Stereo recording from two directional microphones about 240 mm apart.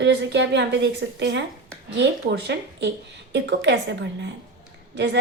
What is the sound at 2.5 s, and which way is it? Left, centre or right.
A woman's voice, right.